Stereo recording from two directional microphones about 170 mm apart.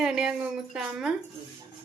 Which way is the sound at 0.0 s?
5° right (ahead or behind).